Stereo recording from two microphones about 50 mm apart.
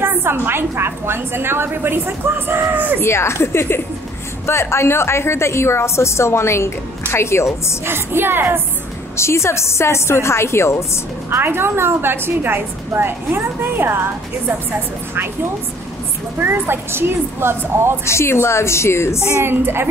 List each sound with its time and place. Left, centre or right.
0.0 s a woman's voice: right
3.0 s a woman's voice: left
7.8 s a woman's voice: right
9.1 s a woman's voice: left
11.2 s a woman's voice: right
16.3 s a woman's voice: right
18.0 s a woman's voice: left
19.4 s a woman's voice: right